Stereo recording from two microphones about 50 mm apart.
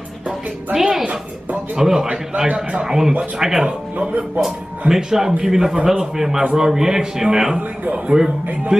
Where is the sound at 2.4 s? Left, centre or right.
Right.